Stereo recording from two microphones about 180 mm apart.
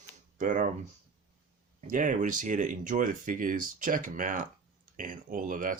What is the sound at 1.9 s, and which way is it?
Speech, 45° right (ahead or behind).